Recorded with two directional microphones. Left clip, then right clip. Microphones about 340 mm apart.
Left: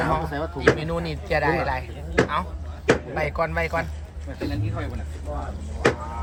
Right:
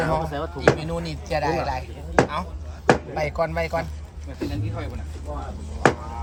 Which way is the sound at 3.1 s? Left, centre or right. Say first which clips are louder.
Even; centre.